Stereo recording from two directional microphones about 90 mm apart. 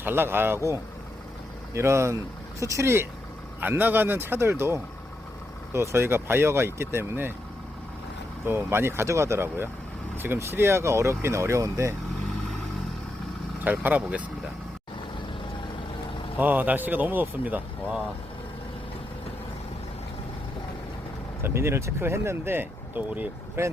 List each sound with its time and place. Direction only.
0.0 s speech: 25° right (ahead or behind)
8.4 s speech: 25° right (ahead or behind)
13.7 s speech: 20° right (ahead or behind)
16.4 s speech: 20° right (ahead or behind)
21.4 s speech: 30° right (ahead or behind)
23.6 s speech: 30° right (ahead or behind)